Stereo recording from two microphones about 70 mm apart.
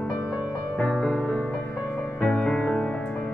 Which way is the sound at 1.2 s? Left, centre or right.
Centre.